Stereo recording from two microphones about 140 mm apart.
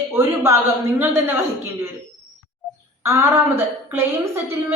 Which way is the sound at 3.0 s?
20° right (ahead or behind).